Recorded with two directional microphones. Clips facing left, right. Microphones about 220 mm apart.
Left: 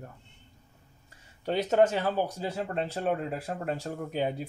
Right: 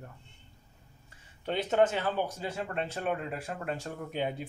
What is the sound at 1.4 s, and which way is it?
Speech, 40° left (ahead or behind).